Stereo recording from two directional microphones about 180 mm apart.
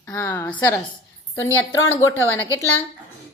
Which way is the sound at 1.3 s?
90° left.